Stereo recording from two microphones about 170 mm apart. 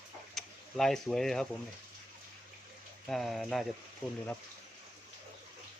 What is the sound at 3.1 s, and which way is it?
Speech, centre (ahead or behind).